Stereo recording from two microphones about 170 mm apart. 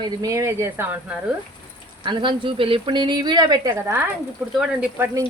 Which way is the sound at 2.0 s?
30° right (ahead or behind).